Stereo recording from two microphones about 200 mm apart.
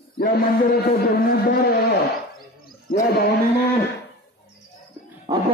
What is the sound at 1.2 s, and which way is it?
Speech, 50° left (ahead or behind).